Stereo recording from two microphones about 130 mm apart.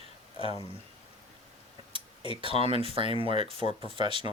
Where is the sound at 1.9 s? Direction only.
45° left (ahead or behind).